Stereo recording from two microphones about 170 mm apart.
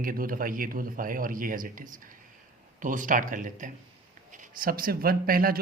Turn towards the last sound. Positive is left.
turn(degrees=-60)  # may be behind; listen again after turning